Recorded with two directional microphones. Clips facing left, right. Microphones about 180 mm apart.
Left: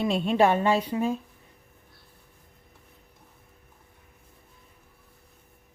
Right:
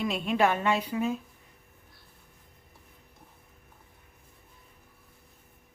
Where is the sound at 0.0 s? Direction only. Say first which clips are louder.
Left 4 dB; 30° left (ahead or behind).